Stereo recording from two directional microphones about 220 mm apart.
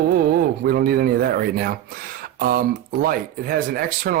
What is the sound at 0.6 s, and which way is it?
Speech, 40° right (ahead or behind).